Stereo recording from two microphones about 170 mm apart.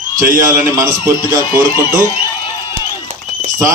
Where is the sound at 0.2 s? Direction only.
50° right (ahead or behind).